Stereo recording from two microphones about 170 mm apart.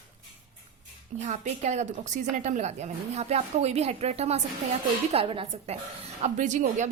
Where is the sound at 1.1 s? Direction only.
45° right (ahead or behind).